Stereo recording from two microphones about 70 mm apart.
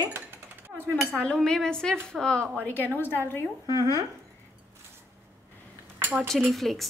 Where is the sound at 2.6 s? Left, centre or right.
Left.